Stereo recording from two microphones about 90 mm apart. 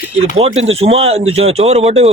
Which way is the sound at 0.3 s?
90° right.